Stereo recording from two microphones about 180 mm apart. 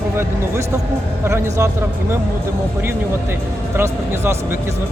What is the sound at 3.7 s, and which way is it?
Speech, 15° right (ahead or behind).